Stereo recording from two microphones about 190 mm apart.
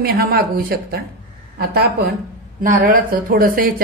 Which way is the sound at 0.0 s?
50° right (ahead or behind).